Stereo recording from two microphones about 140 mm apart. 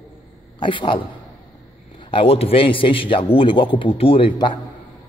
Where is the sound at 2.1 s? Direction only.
40° left (ahead or behind).